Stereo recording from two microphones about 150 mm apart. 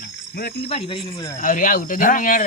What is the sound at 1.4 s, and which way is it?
Speech, 60° left (ahead or behind).